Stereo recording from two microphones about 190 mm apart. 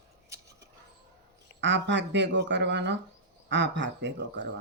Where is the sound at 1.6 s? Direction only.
70° right (ahead or behind).